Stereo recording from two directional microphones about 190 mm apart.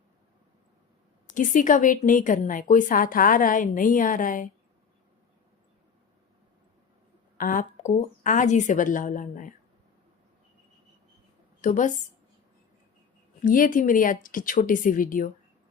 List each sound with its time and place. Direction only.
1.3 s a woman's voice: 45° left (ahead or behind)
7.3 s a woman's voice: 45° left (ahead or behind)
11.6 s a woman's voice: 40° left (ahead or behind)
13.4 s a woman's voice: 45° left (ahead or behind)